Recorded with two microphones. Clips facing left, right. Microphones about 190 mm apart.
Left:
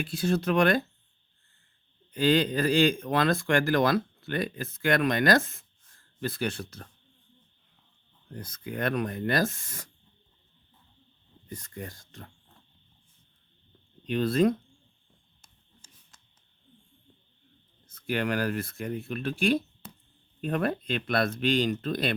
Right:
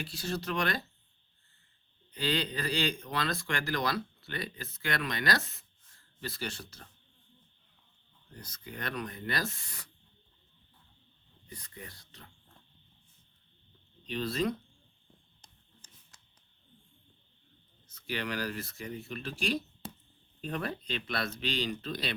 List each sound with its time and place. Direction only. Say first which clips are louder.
0.0 s speech: left 9 dB; 55° left (ahead or behind)
2.1 s speech: left 9 dB; 50° left (ahead or behind)
8.3 s speech: left 9 dB; 50° left (ahead or behind)
11.4 s speech: left 8 dB; 45° left (ahead or behind)
14.1 s speech: left 8 dB; 55° left (ahead or behind)
17.8 s speech: left 8 dB; 55° left (ahead or behind)
19.8 s a sound: right 3 dB; 30° right (ahead or behind)
20.4 s speech: left 8 dB; 55° left (ahead or behind)